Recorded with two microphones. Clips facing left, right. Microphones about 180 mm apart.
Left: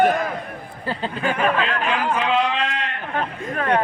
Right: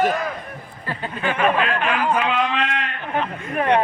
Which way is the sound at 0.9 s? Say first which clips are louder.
Left 3 dB; 30° left (ahead or behind).